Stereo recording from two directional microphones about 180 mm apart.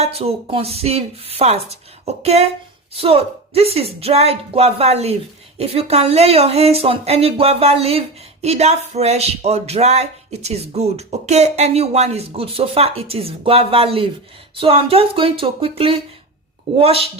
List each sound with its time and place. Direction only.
0.0 s speech: 35° right (ahead or behind)